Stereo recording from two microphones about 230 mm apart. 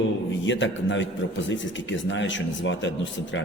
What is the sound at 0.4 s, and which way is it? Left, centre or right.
A man's voice, left.